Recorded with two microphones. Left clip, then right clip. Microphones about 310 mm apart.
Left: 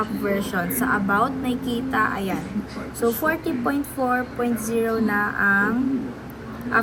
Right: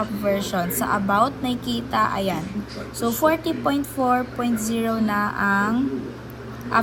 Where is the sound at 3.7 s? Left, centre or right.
Centre.